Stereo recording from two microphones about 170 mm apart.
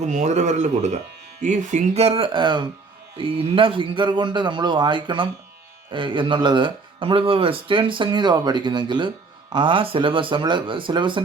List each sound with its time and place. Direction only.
0.1 s speech: 45° right (ahead or behind); by 11.2 s 30° right (ahead or behind)